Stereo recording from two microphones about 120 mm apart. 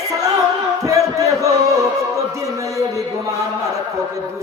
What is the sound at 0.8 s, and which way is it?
Speech, 30° right (ahead or behind).